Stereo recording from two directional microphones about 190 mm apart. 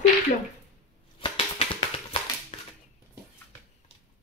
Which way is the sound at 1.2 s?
30° left (ahead or behind).